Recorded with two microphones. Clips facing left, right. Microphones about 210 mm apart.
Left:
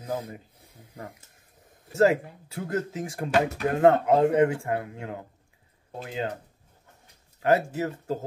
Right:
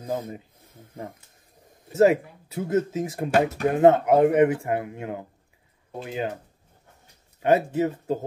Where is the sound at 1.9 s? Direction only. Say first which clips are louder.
Right 3 dB; 20° right (ahead or behind).